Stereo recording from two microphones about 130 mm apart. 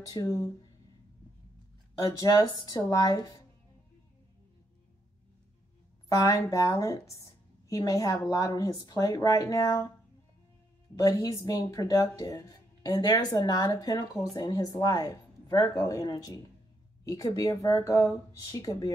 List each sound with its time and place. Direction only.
0.0 s speech: 30° left (ahead or behind)
2.0 s speech: 25° left (ahead or behind)
6.0 s a woman's voice: 25° left (ahead or behind)
11.0 s speech: 25° left (ahead or behind)